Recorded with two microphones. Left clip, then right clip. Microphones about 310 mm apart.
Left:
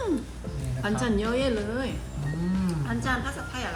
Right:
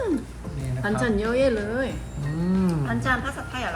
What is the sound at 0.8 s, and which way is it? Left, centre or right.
Speech, centre.